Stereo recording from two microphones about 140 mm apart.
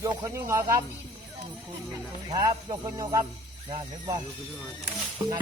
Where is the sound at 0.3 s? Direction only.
20° right (ahead or behind).